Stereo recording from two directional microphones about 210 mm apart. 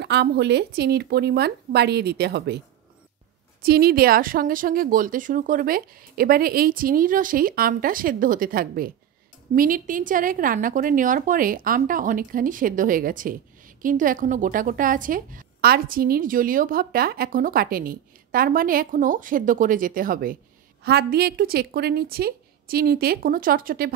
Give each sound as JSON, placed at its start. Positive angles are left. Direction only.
{"t": 0.0, "sound": "speech", "side_deg": -55}
{"t": 3.6, "sound": "a woman's voice", "side_deg": -45}